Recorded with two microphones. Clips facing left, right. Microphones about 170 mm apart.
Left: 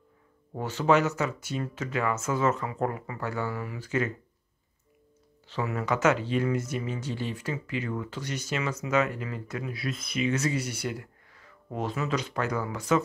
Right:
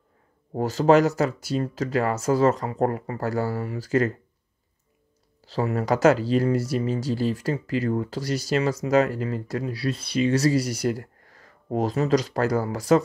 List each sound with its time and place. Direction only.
0.5 s speech: 40° right (ahead or behind)
5.5 s speech: 35° right (ahead or behind)